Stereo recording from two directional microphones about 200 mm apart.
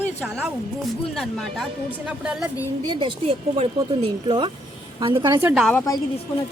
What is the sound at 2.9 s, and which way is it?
Speech, 25° right (ahead or behind).